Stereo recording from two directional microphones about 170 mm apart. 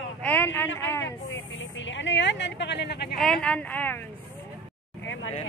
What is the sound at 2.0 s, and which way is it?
Speech, 90° left.